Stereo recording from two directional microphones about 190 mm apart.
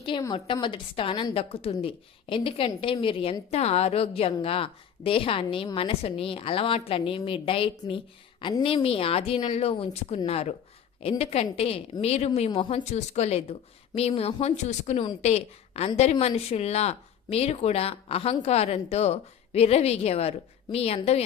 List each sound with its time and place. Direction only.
0.0 s a woman's voice: 25° left (ahead or behind)